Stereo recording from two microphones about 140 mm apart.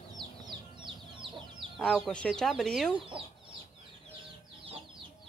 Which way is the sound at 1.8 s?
Centre (ahead or behind).